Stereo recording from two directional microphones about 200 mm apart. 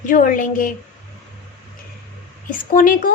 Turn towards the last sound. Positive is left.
turn(degrees=45)  # may be behind; listen again after turning